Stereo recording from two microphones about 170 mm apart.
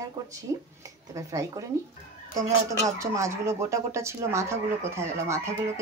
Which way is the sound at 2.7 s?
20° right (ahead or behind).